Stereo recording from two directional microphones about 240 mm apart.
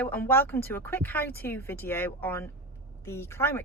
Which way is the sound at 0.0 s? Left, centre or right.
Centre.